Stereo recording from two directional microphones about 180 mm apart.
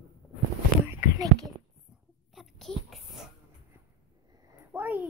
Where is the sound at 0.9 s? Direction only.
20° right (ahead or behind).